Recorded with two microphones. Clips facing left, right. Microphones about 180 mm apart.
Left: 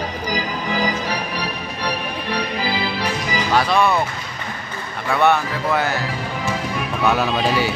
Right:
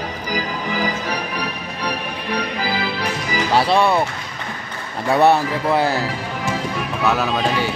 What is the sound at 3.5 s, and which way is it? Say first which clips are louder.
Speech: right 2 dB; 30° right (ahead or behind).